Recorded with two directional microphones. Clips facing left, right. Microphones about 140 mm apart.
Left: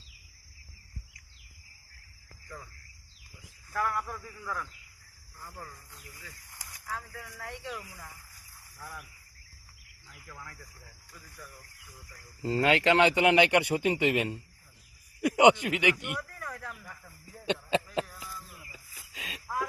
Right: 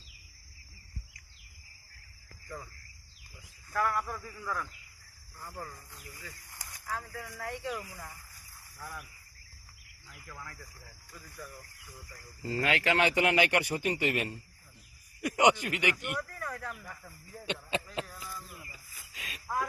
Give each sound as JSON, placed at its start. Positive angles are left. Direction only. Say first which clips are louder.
{"t": 3.7, "sound": "a man's voice", "louder": "right 1 dB", "side_deg": 10}
{"t": 6.2, "sound": "a man's voice", "louder": "right 2 dB", "side_deg": 0}
{"t": 12.4, "sound": "speech", "louder": "left 5 dB", "side_deg": 25}
{"t": 15.4, "sound": "speech", "louder": "left 4 dB", "side_deg": 25}
{"t": 15.6, "sound": "speech", "louder": "left 4 dB", "side_deg": 15}
{"t": 16.4, "sound": "a sound", "louder": "right 2 dB", "side_deg": 0}
{"t": 17.4, "sound": "speech", "louder": "left 6 dB", "side_deg": 30}
{"t": 18.1, "sound": "a sound", "louder": "right 1 dB", "side_deg": -15}
{"t": 19.1, "sound": "a sound", "louder": "left 3 dB", "side_deg": 30}